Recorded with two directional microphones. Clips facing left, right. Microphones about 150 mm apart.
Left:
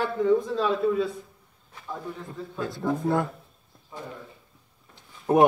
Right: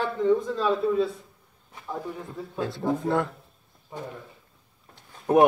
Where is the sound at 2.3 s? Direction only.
5° right (ahead or behind).